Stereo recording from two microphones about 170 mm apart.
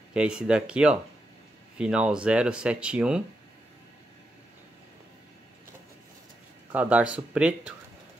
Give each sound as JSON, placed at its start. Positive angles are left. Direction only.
{"t": 0.1, "sound": "speech", "side_deg": -5}
{"t": 6.7, "sound": "speech", "side_deg": -10}